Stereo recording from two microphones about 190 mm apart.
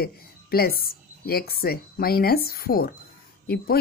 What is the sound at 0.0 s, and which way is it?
A woman's voice, 55° left (ahead or behind).